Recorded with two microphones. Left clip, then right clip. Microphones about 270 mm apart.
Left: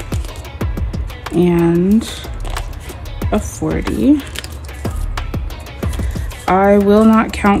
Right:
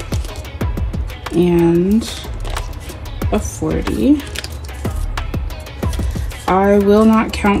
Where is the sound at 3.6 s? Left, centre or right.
Left.